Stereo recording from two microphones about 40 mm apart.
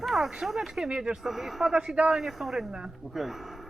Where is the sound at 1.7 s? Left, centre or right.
Right.